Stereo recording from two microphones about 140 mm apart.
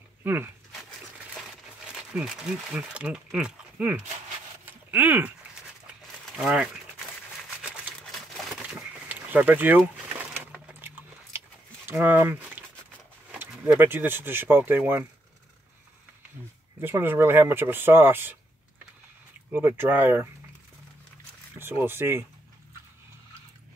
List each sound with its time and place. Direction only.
0.2 s speech: 15° right (ahead or behind)
2.1 s speech: 5° right (ahead or behind)
4.6 s a sound: 15° right (ahead or behind)
6.2 s speech: 5° right (ahead or behind)
8.0 s a sound: centre (ahead or behind)
10.7 s dog: 15° right (ahead or behind)
11.9 s speech: 15° right (ahead or behind)
16.8 s speech: 15° right (ahead or behind)
19.5 s speech: 15° right (ahead or behind)
21.5 s speech: 15° right (ahead or behind)